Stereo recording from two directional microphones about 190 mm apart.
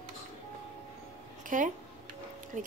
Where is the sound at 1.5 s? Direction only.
45° right (ahead or behind).